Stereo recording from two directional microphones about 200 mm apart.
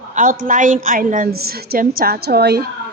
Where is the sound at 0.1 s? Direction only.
40° right (ahead or behind).